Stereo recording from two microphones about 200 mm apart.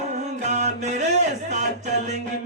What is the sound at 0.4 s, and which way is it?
Mantra, 35° right (ahead or behind).